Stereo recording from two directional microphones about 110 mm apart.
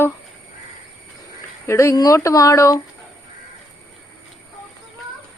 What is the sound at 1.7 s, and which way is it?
Speech, 25° left (ahead or behind).